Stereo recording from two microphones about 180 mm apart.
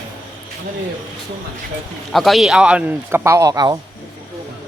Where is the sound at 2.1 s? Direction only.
Centre (ahead or behind); by 3.8 s 20° right (ahead or behind).